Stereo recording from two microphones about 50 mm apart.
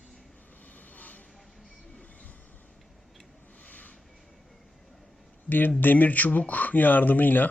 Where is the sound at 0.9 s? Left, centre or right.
Left.